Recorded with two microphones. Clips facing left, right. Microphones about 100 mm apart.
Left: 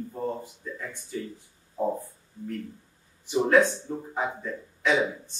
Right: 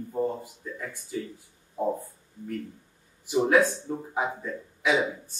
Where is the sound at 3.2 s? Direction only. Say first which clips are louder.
Left 1 dB; 5° right (ahead or behind).